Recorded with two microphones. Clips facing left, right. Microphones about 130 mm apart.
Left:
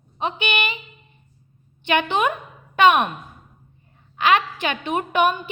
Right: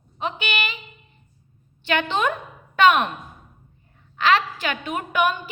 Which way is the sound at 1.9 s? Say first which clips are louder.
Left 2 dB; 15° left (ahead or behind).